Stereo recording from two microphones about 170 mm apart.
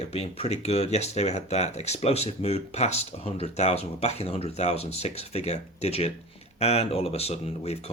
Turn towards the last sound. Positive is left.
turn(degrees=40)  # may be behind; listen again after turning